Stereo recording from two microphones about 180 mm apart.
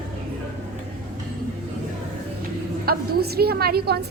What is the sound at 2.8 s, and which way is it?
A woman's voice, 60° right (ahead or behind).